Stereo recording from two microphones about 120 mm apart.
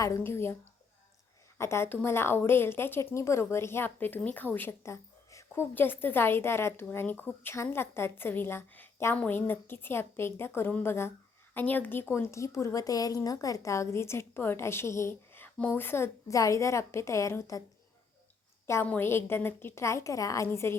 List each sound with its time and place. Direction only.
0.2 s a woman's voice: 20° left (ahead or behind)
1.5 s a woman's voice: 20° left (ahead or behind)
18.6 s a woman's voice: 20° left (ahead or behind)